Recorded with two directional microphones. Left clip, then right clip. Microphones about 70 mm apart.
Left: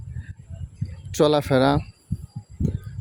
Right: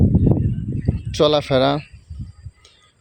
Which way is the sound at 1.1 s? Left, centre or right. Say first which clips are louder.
Right 3 dB; left.